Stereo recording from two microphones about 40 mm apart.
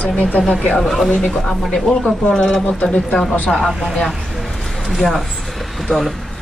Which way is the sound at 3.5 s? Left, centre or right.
Centre.